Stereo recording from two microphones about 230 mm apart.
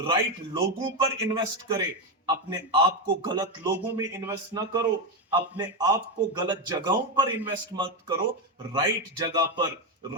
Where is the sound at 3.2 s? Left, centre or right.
Centre.